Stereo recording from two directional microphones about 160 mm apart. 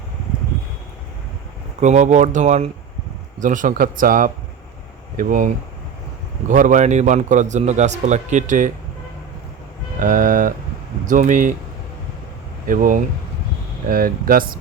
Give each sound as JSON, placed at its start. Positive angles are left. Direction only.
{"t": 1.8, "sound": "speech", "side_deg": -45}
{"t": 6.5, "sound": "speech", "side_deg": -55}
{"t": 10.0, "sound": "speech", "side_deg": -55}
{"t": 12.6, "sound": "speech", "side_deg": -60}